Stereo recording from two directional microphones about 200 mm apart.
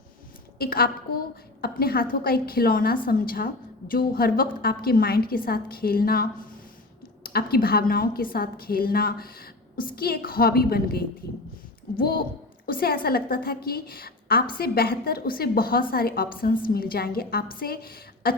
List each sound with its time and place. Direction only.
0.6 s a woman's voice: 45° left (ahead or behind)